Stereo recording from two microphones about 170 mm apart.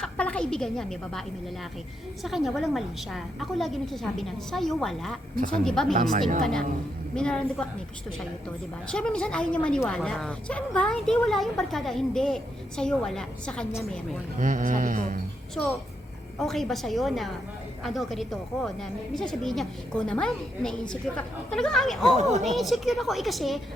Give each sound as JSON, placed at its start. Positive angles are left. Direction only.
{"t": 0.0, "sound": "a woman's voice", "side_deg": 5}
{"t": 2.2, "sound": "a woman's voice", "side_deg": 0}
{"t": 14.3, "sound": "a man's voice", "side_deg": -50}
{"t": 16.4, "sound": "a woman's voice", "side_deg": 0}
{"t": 22.1, "sound": "speech", "side_deg": -40}
{"t": 22.4, "sound": "a woman's voice", "side_deg": 0}